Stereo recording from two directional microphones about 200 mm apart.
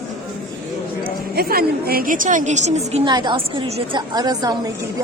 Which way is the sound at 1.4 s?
50° right (ahead or behind).